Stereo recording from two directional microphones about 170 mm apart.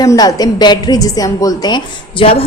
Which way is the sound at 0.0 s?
20° left (ahead or behind).